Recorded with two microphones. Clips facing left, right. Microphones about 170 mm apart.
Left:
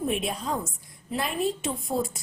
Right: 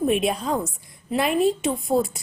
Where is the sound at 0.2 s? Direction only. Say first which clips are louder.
Right 6 dB; 75° right (ahead or behind).